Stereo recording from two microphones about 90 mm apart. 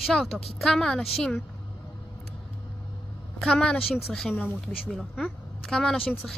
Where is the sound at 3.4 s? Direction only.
10° left (ahead or behind).